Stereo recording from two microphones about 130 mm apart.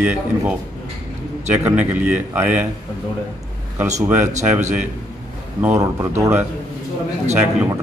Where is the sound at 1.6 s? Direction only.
10° right (ahead or behind).